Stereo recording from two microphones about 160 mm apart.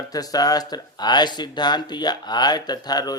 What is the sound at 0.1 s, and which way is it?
Speech, 25° left (ahead or behind).